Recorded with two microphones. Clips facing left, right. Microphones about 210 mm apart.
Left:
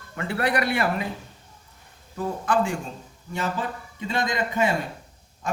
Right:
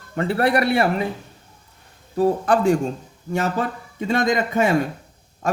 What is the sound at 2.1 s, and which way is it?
Speech, 35° right (ahead or behind).